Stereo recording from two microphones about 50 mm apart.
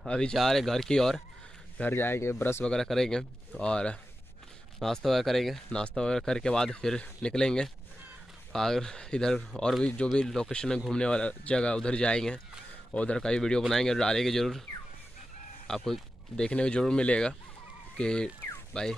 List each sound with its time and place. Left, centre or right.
0.0 s speech: centre
0.3 s speech: centre
1.9 s speech: left
2.6 s speech: centre
4.7 s speech: centre
5.7 s speech: centre
7.0 s speech: left; by 14.6 s centre
15.6 s speech: centre
16.4 s speech: centre